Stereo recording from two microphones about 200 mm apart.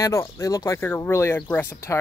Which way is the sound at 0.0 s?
15° left (ahead or behind).